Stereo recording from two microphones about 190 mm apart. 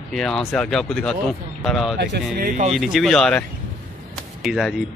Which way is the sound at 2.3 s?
45° right (ahead or behind).